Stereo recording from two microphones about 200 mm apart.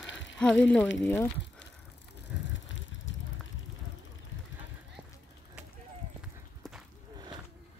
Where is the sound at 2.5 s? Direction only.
70° left (ahead or behind).